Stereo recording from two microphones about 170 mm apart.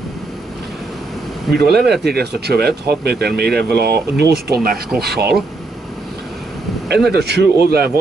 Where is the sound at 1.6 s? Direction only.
70° right (ahead or behind).